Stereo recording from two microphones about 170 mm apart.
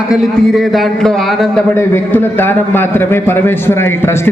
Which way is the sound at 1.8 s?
15° left (ahead or behind).